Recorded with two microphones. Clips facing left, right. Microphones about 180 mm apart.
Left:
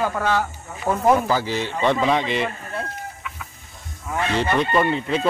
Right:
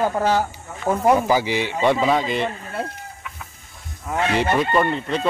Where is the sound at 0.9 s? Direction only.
10° right (ahead or behind).